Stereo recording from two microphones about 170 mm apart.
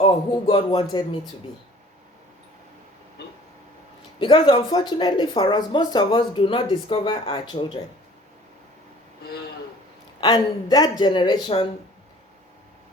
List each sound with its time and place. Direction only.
0.0 s speech: 30° left (ahead or behind)
4.2 s speech: 30° left (ahead or behind)
10.2 s speech: 25° left (ahead or behind)